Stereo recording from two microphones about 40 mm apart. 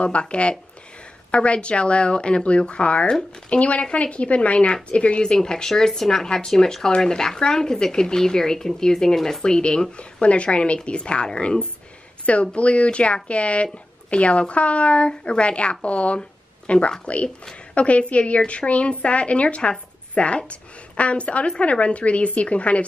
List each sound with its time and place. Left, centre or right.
0.0 s a woman's voice: left
5.3 s speech: centre
9.4 s a woman's voice: left
12.3 s a woman's voice: left